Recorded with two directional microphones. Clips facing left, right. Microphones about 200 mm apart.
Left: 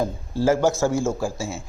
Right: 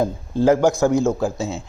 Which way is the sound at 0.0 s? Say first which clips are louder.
Right 4 dB; 20° right (ahead or behind).